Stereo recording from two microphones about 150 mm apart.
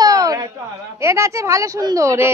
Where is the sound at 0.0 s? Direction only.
25° right (ahead or behind).